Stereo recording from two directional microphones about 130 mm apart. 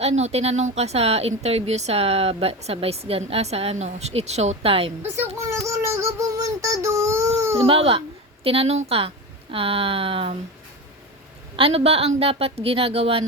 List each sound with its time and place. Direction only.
0.0 s speech: 55° right (ahead or behind)
5.1 s a child's voice: 20° right (ahead or behind)
5.6 s child singing: 25° right (ahead or behind)
7.6 s speech: 45° right (ahead or behind)
11.5 s speech: 45° right (ahead or behind)